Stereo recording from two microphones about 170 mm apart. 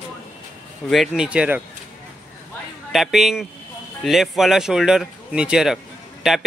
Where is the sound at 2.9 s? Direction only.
Centre (ahead or behind).